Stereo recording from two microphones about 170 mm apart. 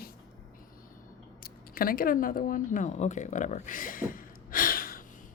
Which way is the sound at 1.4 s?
60° left (ahead or behind).